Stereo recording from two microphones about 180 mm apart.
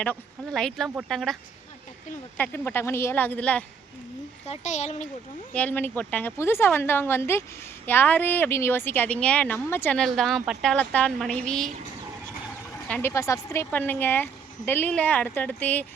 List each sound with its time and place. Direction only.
0.0 s speech: 5° left (ahead or behind)
0.9 s speech: 10° right (ahead or behind)
1.1 s speech: centre (ahead or behind)
2.4 s speech: 10° left (ahead or behind)
4.4 s a child's voice: 40° left (ahead or behind)
5.5 s speech: 10° left (ahead or behind)
12.9 s speech: 15° left (ahead or behind)